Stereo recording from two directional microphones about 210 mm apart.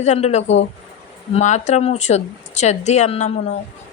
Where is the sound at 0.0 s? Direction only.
30° left (ahead or behind).